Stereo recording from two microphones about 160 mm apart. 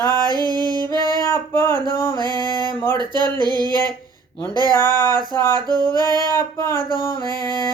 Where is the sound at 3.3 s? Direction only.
25° right (ahead or behind).